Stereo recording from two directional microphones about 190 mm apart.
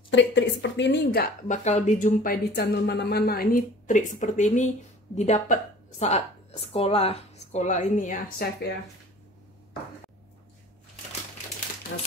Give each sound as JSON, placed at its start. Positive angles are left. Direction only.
{"t": 0.1, "sound": "speech", "side_deg": 70}
{"t": 1.6, "sound": "a woman's voice", "side_deg": 40}